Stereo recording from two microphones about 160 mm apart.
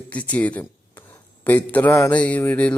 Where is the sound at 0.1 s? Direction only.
10° left (ahead or behind).